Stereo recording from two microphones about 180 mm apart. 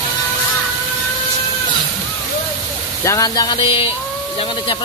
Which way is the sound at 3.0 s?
20° left (ahead or behind).